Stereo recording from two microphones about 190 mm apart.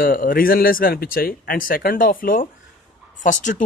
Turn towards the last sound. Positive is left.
turn(degrees=45)  # may be behind; listen again after turning